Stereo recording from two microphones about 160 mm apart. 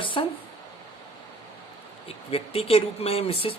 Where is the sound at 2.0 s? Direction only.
40° left (ahead or behind).